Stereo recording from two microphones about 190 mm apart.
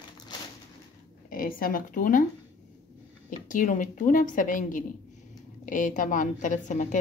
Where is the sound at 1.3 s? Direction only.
45° left (ahead or behind).